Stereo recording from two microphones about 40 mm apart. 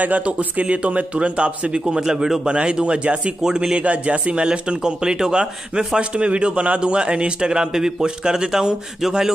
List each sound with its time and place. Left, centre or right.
0.0 s a man's voice: right; by 2.4 s centre
2.4 s speech: right